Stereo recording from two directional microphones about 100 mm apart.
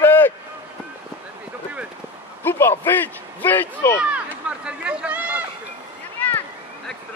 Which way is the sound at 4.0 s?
10° right (ahead or behind).